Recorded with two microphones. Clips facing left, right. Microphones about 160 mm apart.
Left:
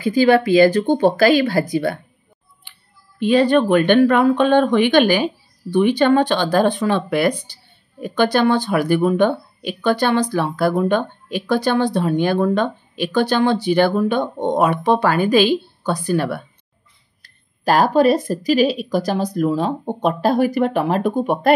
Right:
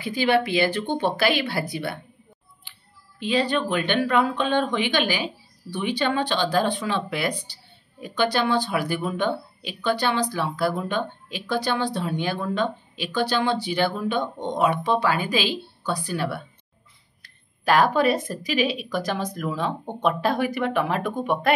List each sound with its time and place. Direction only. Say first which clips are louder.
0.0 s speech: left 7 dB; 40° left (ahead or behind)
3.2 s speech: left 9 dB; 50° left (ahead or behind)
17.2 s speech: left 7 dB; 35° left (ahead or behind)